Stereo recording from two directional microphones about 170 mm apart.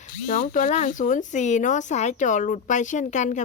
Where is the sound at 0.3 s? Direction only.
50° left (ahead or behind).